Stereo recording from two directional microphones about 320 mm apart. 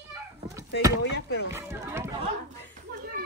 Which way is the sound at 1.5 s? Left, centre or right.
Centre.